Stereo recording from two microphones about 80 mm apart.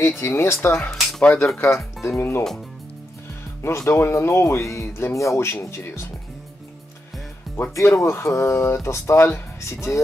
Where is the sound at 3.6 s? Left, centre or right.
Left.